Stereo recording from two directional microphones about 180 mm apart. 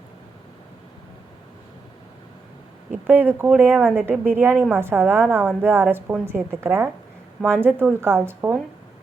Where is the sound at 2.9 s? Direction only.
10° right (ahead or behind).